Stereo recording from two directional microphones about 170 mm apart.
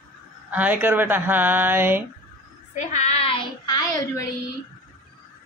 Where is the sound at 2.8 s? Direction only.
40° left (ahead or behind).